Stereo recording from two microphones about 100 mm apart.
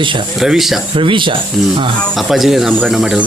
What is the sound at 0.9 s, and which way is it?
Speech, 55° right (ahead or behind).